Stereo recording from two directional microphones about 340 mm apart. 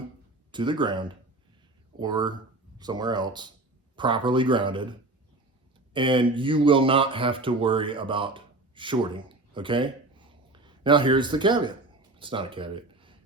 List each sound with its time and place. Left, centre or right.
0.5 s speech: centre